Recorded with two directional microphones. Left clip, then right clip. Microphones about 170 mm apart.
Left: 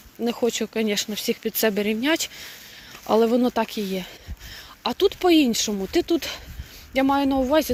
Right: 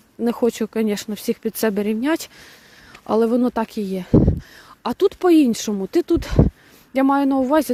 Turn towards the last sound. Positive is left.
turn(degrees=-45)  # may be behind; listen again after turning